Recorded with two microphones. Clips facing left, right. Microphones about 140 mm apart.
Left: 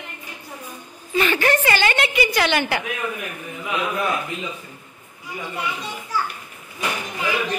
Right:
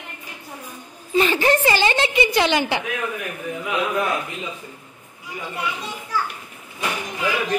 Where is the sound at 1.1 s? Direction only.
30° right (ahead or behind).